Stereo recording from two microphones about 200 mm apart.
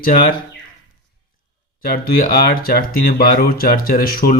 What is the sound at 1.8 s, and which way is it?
Speech, 45° left (ahead or behind).